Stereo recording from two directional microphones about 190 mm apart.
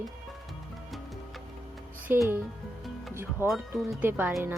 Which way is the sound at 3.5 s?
Centre (ahead or behind).